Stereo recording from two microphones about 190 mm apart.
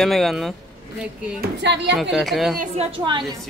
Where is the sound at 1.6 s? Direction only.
65° right (ahead or behind).